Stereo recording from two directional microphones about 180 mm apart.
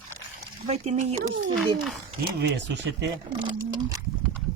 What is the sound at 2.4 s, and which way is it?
Speech, 70° right (ahead or behind).